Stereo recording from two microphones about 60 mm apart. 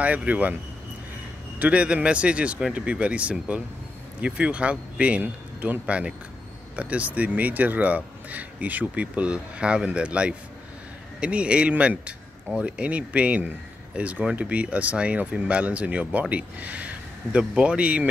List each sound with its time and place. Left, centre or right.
0.0 s speech: right
1.6 s speech: right